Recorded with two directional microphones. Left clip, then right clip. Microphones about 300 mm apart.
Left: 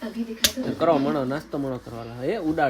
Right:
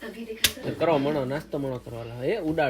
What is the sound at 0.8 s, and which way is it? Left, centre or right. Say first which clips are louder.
Speech: left 2 dB; centre.